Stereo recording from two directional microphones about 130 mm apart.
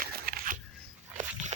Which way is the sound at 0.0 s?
90° right.